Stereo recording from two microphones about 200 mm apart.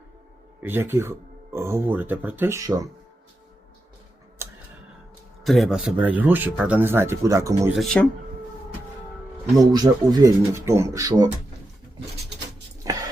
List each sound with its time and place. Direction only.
0.6 s speech: 10° right (ahead or behind)
4.4 s music: 15° right (ahead or behind)
5.4 s speech: centre (ahead or behind); by 7.7 s 15° right (ahead or behind)
7.7 s speech: centre (ahead or behind)
9.7 s speech: 20° right (ahead or behind)
12.8 s a sound: 15° right (ahead or behind)